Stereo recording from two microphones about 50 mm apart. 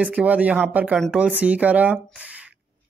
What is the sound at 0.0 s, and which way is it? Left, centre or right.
Speech, right.